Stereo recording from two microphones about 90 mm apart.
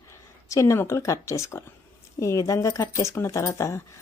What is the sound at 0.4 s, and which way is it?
A woman's voice, 35° left (ahead or behind).